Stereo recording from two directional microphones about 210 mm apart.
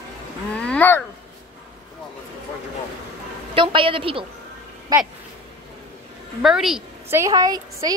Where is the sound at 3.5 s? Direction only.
25° right (ahead or behind).